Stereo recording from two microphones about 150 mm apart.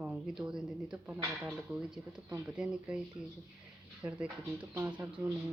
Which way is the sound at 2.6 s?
5° right (ahead or behind).